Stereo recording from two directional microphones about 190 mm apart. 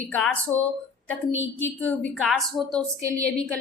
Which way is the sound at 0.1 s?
10° left (ahead or behind).